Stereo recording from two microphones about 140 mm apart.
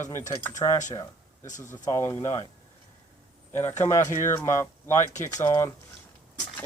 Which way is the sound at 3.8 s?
15° left (ahead or behind).